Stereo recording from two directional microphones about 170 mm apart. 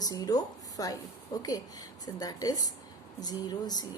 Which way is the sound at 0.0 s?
20° left (ahead or behind).